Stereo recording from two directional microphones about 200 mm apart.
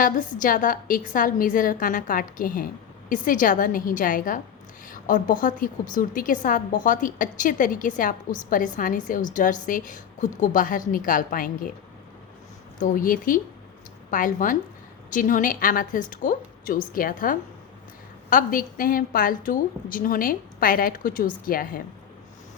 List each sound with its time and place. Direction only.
0.0 s a woman's voice: 40° left (ahead or behind)
12.8 s a woman's voice: 40° left (ahead or behind)